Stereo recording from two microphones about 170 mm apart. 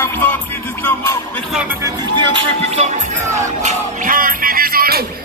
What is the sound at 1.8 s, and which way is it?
Music, 25° right (ahead or behind).